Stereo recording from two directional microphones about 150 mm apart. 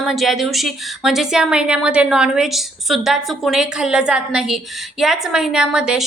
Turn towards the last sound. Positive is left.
turn(degrees=-5)  # may be behind; listen again after turning